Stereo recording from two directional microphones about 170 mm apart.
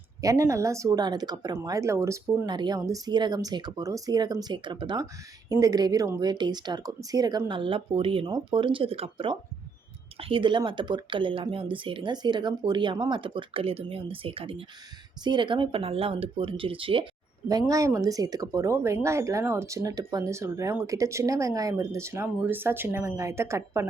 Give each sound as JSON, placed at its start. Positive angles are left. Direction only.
{"t": 0.2, "sound": "speech", "side_deg": -20}
{"t": 17.5, "sound": "speech", "side_deg": -20}